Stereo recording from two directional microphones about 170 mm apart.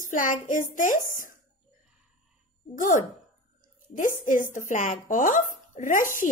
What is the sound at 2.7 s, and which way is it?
A woman's voice, 50° left (ahead or behind).